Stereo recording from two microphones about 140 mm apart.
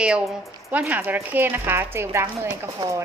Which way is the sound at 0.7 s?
10° right (ahead or behind).